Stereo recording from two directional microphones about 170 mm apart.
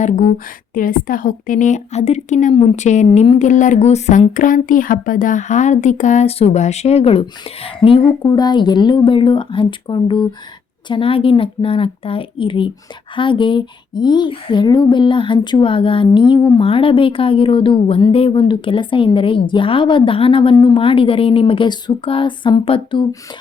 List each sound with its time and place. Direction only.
0.0 s a woman's voice: 45° left (ahead or behind)
3.1 s speech: 30° left (ahead or behind)
3.3 s speech: 45° left (ahead or behind); by 23.0 s 30° left (ahead or behind)